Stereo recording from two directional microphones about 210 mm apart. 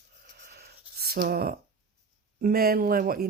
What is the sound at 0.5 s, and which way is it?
Writing, 50° right (ahead or behind).